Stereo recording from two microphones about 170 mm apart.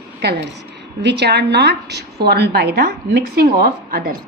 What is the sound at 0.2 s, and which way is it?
A woman's voice, 75° right (ahead or behind).